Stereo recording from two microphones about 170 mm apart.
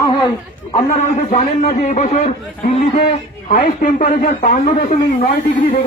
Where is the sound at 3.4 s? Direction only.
50° left (ahead or behind).